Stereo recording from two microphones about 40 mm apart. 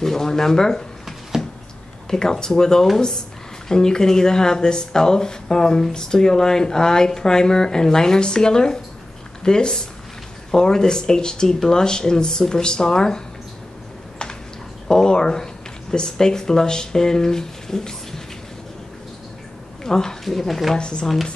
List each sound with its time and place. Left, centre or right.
0.0 s speech: centre
2.0 s speech: centre
14.9 s speech: centre
19.8 s speech: centre
20.7 s speech: left